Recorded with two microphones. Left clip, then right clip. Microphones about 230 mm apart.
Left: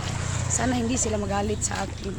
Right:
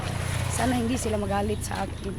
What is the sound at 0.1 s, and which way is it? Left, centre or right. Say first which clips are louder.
Vehicle: left 1 dB; right.